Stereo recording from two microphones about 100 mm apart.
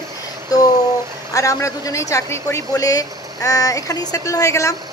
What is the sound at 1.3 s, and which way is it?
Speech, 35° left (ahead or behind).